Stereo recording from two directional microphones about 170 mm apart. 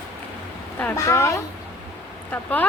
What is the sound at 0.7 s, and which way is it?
Speech, 15° left (ahead or behind).